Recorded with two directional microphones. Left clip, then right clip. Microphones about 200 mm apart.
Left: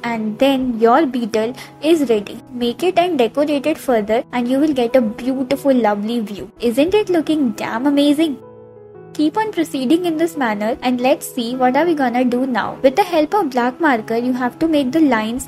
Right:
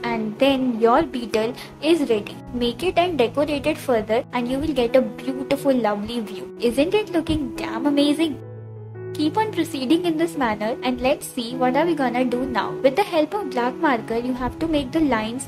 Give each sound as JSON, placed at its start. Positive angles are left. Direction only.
{"t": 0.0, "sound": "a woman's voice", "side_deg": 20}